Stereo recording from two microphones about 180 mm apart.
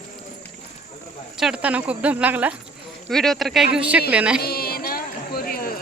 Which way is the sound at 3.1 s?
Centre (ahead or behind).